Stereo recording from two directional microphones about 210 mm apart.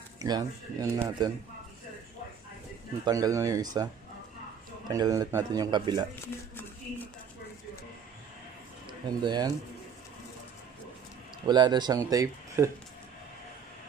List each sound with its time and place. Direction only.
0.2 s speech: 15° right (ahead or behind)
3.1 s speech: 15° right (ahead or behind)
6.2 s a sound: 10° left (ahead or behind)
8.8 s speech: 20° right (ahead or behind)
11.4 s speech: 20° right (ahead or behind)